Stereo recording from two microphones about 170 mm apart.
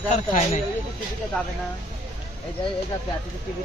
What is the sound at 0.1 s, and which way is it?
Speech, 45° left (ahead or behind).